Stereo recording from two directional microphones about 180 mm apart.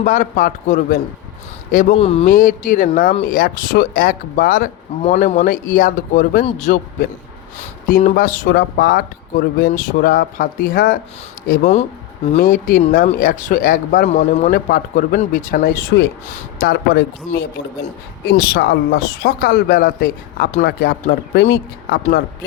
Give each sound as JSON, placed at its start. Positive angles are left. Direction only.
{"t": 0.0, "sound": "speech", "side_deg": 45}
{"t": 2.0, "sound": "a man's voice", "side_deg": 35}
{"t": 2.2, "sound": "speech", "side_deg": 50}
{"t": 5.0, "sound": "a man's voice", "side_deg": 35}
{"t": 12.4, "sound": "speech", "side_deg": 50}